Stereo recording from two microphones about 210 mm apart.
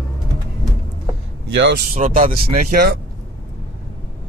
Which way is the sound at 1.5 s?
55° right (ahead or behind).